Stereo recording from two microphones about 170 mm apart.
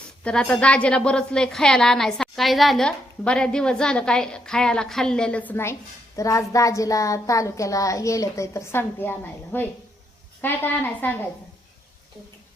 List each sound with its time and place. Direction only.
0.3 s a woman's voice: 5° left (ahead or behind)